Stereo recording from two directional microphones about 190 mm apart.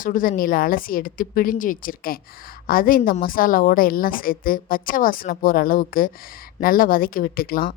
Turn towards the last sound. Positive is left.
turn(degrees=50)  # may be behind; listen again after turning